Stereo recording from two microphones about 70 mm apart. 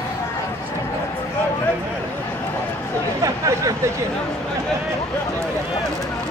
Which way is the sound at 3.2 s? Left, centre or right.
Right.